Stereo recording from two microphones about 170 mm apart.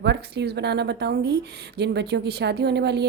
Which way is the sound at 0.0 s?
80° right.